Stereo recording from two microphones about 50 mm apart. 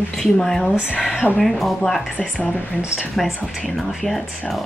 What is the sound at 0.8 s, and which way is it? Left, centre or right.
Speech, centre.